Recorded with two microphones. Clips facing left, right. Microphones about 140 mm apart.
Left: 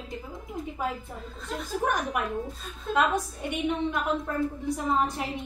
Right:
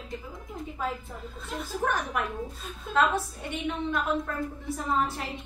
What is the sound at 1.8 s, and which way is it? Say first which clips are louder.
A woman's voice: left 1 dB; 15° left (ahead or behind).